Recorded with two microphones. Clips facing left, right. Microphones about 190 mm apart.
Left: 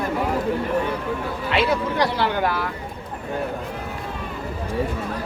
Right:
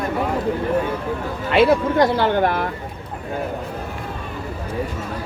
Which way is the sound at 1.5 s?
50° right (ahead or behind).